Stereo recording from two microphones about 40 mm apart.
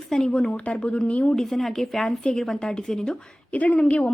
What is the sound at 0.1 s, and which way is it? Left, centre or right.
A woman's voice, left.